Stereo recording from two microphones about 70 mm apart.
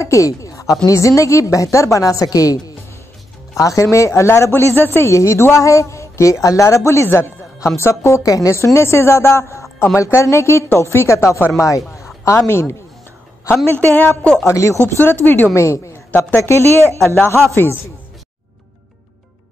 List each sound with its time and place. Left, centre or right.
0.0 s a sound: left
0.8 s a woman's voice: left
4.5 s a woman's voice: left
13.7 s a woman's voice: left
14.4 s a woman's voice: left
14.8 s a woman's voice: left
15.5 s a woman's voice: left